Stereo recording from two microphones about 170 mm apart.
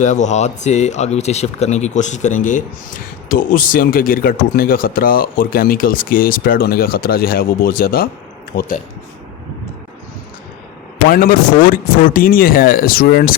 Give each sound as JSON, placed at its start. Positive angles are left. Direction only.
{"t": 0.0, "sound": "speech", "side_deg": 45}
{"t": 11.1, "sound": "speech", "side_deg": 55}